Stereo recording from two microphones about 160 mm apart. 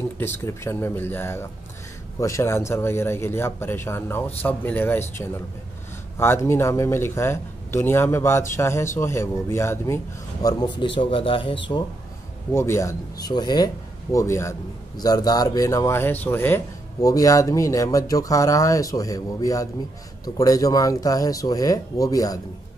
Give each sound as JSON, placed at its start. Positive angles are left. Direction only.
{"t": 0.2, "sound": "speech", "side_deg": 15}
{"t": 6.1, "sound": "speech", "side_deg": 15}
{"t": 10.4, "sound": "a man's voice", "side_deg": 25}
{"t": 12.5, "sound": "a man's voice", "side_deg": 15}